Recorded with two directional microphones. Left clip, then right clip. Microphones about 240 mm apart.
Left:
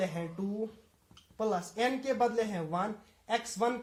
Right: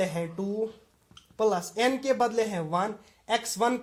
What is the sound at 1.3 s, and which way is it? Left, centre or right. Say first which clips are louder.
Speech: right 7 dB; right.